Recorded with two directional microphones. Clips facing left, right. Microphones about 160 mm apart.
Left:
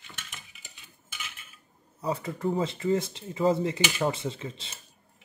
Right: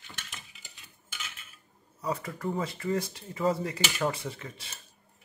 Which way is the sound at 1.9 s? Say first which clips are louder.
Left 2 dB; 25° left (ahead or behind).